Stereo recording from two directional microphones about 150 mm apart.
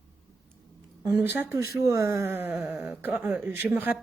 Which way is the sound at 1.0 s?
15° right (ahead or behind).